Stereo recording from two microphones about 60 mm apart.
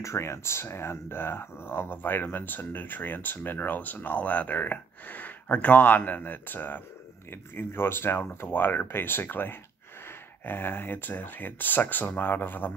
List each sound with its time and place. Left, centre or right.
0.0 s speech: left